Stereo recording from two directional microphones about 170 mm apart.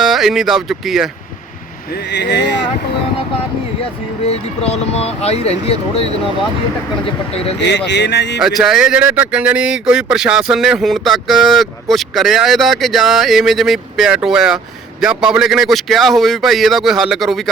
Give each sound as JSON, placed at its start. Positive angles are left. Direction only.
{"t": 0.0, "sound": "speech", "side_deg": 0}
{"t": 2.0, "sound": "speech", "side_deg": 85}
{"t": 4.3, "sound": "speech", "side_deg": 40}
{"t": 7.9, "sound": "speech", "side_deg": 90}
{"t": 8.4, "sound": "speech", "side_deg": 0}